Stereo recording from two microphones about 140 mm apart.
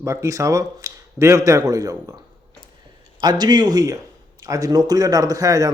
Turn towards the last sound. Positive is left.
turn(degrees=-25)  # may be behind; listen again after turning